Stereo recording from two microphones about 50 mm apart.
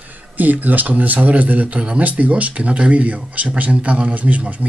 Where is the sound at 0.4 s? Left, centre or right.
Right.